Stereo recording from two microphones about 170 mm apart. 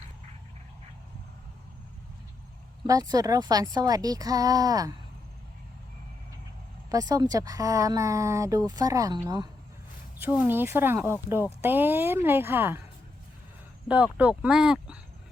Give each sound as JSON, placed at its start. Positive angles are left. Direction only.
{"t": 2.8, "sound": "speech", "side_deg": -20}
{"t": 6.9, "sound": "speech", "side_deg": -25}
{"t": 10.2, "sound": "speech", "side_deg": -10}
{"t": 13.8, "sound": "speech", "side_deg": -10}